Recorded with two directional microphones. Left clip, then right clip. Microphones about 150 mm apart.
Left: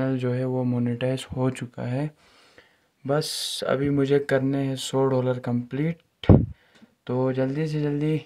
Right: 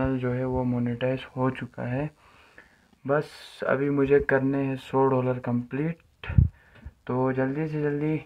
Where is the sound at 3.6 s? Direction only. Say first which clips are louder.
Right 1 dB; 30° left (ahead or behind).